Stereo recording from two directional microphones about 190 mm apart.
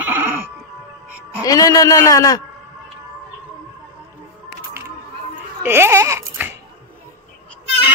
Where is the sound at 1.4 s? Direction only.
20° left (ahead or behind).